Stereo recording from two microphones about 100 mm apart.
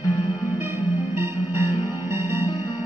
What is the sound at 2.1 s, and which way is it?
Music, 25° right (ahead or behind).